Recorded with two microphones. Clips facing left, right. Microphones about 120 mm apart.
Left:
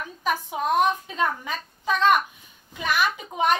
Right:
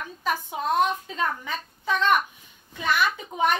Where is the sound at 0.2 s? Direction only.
15° left (ahead or behind).